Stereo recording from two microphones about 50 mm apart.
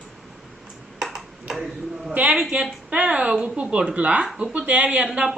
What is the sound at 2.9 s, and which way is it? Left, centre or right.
A woman's voice, right.